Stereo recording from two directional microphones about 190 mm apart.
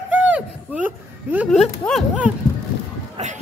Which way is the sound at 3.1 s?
40° right (ahead or behind).